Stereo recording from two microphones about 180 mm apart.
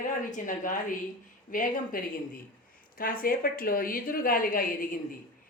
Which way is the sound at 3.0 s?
55° left (ahead or behind).